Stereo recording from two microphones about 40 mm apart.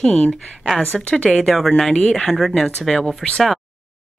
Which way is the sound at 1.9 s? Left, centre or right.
Left.